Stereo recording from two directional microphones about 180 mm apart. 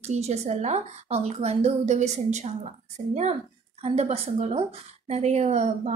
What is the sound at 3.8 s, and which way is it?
Speech, 35° right (ahead or behind).